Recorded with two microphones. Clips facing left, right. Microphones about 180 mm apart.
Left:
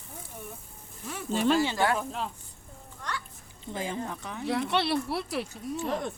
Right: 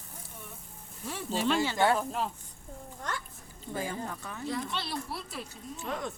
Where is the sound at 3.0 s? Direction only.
45° right (ahead or behind).